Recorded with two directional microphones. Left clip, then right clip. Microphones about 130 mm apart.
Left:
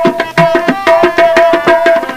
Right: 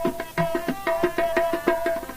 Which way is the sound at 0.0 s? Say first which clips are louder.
Left 16 dB; 25° left (ahead or behind).